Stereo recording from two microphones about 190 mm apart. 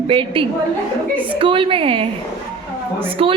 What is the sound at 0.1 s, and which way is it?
A woman's voice, 30° right (ahead or behind).